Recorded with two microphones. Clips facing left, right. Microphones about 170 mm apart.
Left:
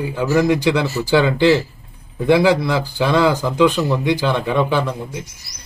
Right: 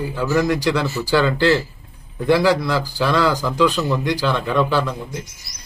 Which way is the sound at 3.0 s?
20° left (ahead or behind).